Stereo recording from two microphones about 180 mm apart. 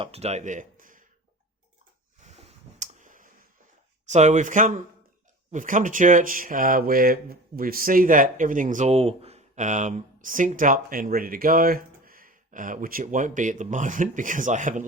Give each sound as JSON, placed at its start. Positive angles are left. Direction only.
{"t": 0.0, "sound": "speech", "side_deg": -35}
{"t": 2.2, "sound": "a sound", "side_deg": -40}
{"t": 4.0, "sound": "speech", "side_deg": -40}